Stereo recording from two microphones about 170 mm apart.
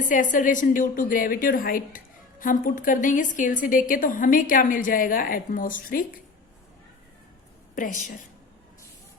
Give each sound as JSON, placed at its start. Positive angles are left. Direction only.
{"t": 0.1, "sound": "a woman's voice", "side_deg": 50}
{"t": 7.8, "sound": "a woman's voice", "side_deg": 45}